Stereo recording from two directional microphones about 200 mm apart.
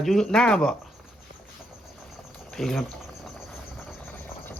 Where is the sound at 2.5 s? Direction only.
Centre (ahead or behind).